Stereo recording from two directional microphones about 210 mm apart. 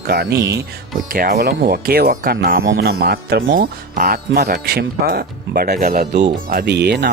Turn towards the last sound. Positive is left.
turn(degrees=-55)  # may be behind; listen again after turning